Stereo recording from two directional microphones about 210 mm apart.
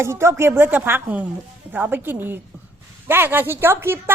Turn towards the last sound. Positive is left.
turn(degrees=-10)  # may be behind; listen again after turning